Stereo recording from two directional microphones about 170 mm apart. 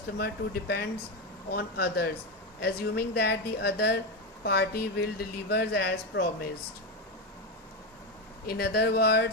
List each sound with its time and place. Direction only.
0.2 s speech: 65° left (ahead or behind)
8.4 s speech: 70° left (ahead or behind)